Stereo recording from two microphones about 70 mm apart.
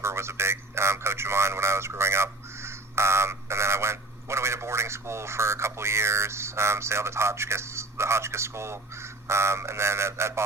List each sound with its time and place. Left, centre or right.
0.0 s speech: right